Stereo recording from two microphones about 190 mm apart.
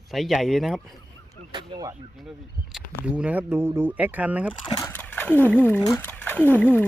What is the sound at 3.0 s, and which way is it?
Speech, 5° right (ahead or behind).